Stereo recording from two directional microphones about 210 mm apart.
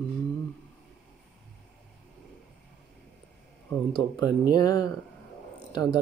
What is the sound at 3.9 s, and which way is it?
Speech, 20° left (ahead or behind).